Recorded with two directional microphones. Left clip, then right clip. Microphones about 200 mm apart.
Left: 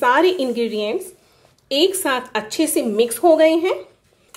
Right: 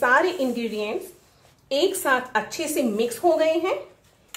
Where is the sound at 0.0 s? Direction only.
50° left (ahead or behind).